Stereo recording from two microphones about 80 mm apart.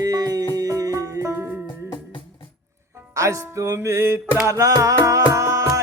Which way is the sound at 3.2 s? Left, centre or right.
Right.